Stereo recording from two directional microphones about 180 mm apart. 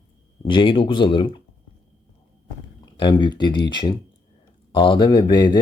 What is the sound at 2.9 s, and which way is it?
Speech, 25° left (ahead or behind).